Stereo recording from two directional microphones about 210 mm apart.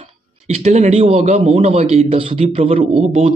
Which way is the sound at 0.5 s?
30° right (ahead or behind).